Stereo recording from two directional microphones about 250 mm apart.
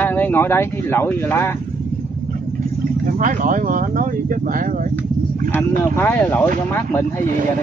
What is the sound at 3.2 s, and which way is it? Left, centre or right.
Speech, right.